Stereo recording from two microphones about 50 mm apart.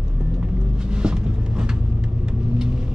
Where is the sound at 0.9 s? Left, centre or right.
Centre.